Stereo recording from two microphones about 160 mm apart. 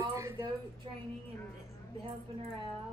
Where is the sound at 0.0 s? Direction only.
20° right (ahead or behind).